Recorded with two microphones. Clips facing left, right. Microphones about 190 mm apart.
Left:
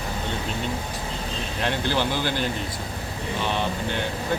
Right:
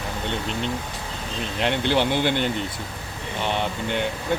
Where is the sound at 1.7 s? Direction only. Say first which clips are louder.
Right 3 dB; 20° right (ahead or behind).